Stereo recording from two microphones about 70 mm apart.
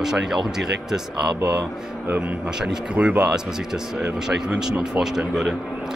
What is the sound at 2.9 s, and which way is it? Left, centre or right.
Speech, centre.